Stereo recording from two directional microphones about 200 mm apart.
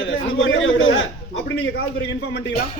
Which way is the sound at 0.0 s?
75° left (ahead or behind).